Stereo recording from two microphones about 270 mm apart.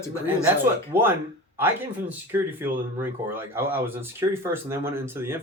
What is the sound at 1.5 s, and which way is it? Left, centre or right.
Speech, centre.